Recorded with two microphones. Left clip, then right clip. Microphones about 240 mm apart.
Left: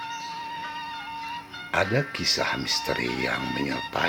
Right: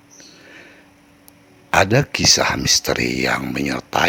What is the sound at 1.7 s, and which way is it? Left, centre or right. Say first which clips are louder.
Speech: right 9 dB; right.